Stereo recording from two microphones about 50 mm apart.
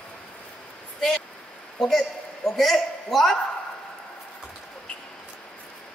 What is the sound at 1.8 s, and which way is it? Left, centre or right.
A woman's voice, centre.